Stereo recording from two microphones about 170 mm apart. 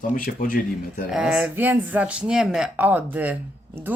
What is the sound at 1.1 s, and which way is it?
Speech, 5° right (ahead or behind).